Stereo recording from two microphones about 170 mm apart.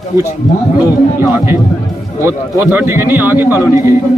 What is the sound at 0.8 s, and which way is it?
Speech, 10° right (ahead or behind).